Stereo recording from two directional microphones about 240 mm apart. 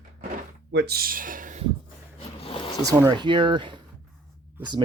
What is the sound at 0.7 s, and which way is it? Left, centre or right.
Speech, right.